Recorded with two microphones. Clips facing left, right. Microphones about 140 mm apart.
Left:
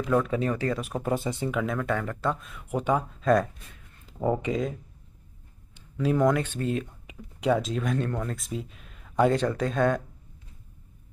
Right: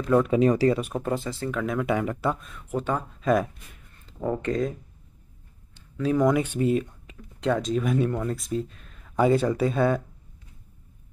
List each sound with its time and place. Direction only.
0.1 s speech: 15° right (ahead or behind)
0.7 s speech: centre (ahead or behind)
1.0 s speech: 20° left (ahead or behind)
1.5 s speech: 5° left (ahead or behind)
1.8 s speech: 15° right (ahead or behind)
2.4 s speech: 5° left (ahead or behind)
3.2 s speech: centre (ahead or behind)
4.0 s speech: 10° left (ahead or behind)
5.8 s a sound: 10° left (ahead or behind)
6.2 s speech: 10° right (ahead or behind)
7.1 s speech: 10° left (ahead or behind)